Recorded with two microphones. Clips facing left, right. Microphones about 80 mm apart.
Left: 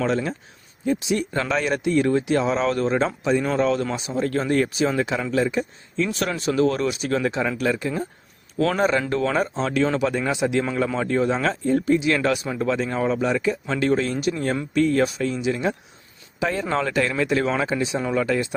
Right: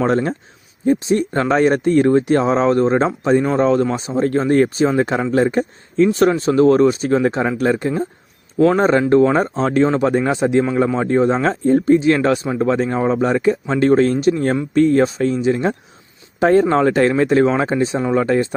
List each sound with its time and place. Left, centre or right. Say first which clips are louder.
0.0 s speech: right 6 dB; right
6.1 s speech: right 10 dB; right
8.5 s speech: right 7 dB; right